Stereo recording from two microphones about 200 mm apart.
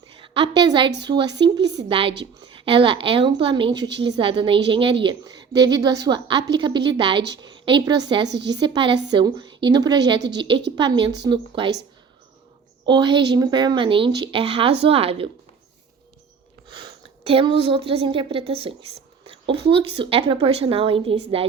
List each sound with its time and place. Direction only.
0.2 s a woman's voice: 25° right (ahead or behind)
8.3 s a woman's voice: 60° right (ahead or behind)
8.5 s a woman's voice: 20° right (ahead or behind)
12.8 s a woman's voice: 20° right (ahead or behind)
17.2 s a woman's voice: 25° right (ahead or behind)